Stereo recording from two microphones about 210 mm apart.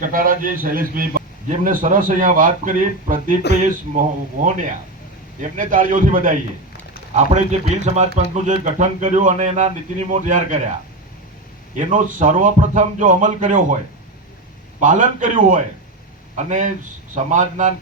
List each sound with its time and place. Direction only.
0.0 s a man's voice: 40° right (ahead or behind)
11.8 s a man's voice: 35° right (ahead or behind)
14.8 s a man's voice: 40° right (ahead or behind)